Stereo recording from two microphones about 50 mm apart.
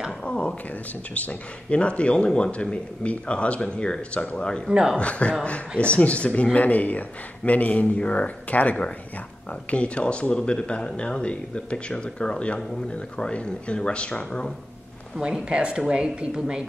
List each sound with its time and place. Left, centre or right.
0.2 s a sound: centre
1.1 s speech: left
4.6 s speech: centre
4.9 s speech: left
15.1 s speech: centre